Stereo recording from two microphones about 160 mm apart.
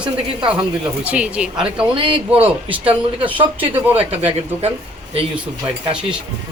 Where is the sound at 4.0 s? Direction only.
40° right (ahead or behind).